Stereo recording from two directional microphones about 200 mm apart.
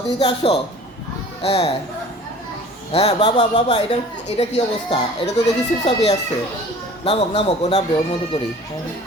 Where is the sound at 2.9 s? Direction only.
25° left (ahead or behind).